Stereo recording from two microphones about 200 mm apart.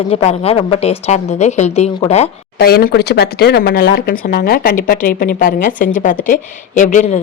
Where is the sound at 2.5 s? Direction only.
50° left (ahead or behind).